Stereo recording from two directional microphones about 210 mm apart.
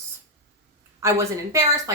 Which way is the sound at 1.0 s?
15° right (ahead or behind).